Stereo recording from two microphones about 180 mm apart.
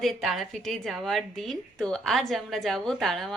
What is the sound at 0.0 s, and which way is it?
A woman's voice, centre (ahead or behind).